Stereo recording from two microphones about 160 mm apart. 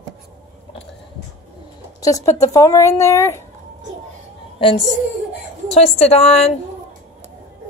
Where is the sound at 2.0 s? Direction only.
20° left (ahead or behind).